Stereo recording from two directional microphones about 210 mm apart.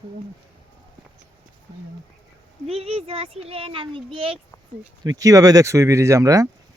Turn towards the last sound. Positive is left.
turn(degrees=-15)  # may be behind; listen again after turning